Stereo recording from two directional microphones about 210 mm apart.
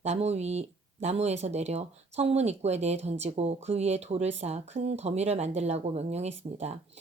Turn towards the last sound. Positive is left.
turn(degrees=-30)  # may be behind; listen again after turning